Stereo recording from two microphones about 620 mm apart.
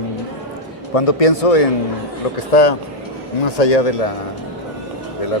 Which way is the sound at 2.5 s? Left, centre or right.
Left.